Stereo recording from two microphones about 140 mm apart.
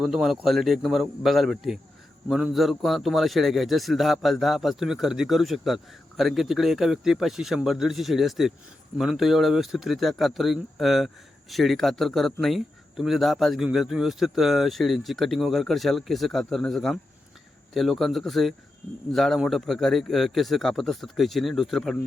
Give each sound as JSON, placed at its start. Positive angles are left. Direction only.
{"t": 0.0, "sound": "speech", "side_deg": -5}